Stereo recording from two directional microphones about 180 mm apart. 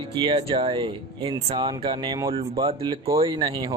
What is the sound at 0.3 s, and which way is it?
Speech, 30° right (ahead or behind).